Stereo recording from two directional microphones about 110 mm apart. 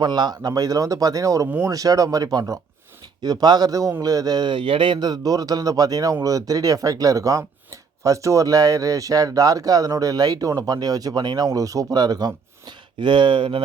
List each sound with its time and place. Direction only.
0.0 s speech: 40° right (ahead or behind)
1.5 s speech: 20° right (ahead or behind)
1.7 s speech: 35° right (ahead or behind); by 13.6 s 50° right (ahead or behind)